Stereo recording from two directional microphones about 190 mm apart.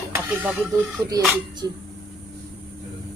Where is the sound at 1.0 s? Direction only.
20° right (ahead or behind).